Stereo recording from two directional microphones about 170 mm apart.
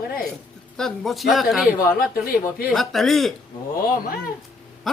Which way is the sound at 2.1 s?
60° left (ahead or behind).